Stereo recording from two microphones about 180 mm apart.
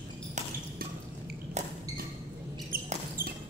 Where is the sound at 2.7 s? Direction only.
55° right (ahead or behind).